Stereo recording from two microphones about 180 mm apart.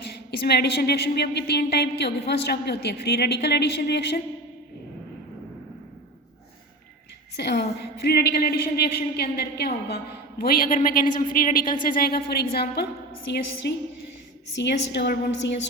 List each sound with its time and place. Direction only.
0.1 s a woman's voice: 65° left (ahead or behind)
7.3 s a woman's voice: 65° left (ahead or behind)
13.3 s a woman's voice: 70° left (ahead or behind)